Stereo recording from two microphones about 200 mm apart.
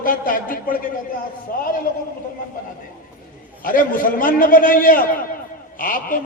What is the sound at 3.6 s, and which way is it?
A man's voice, 45° left (ahead or behind).